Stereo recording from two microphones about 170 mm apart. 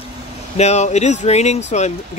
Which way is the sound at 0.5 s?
40° left (ahead or behind).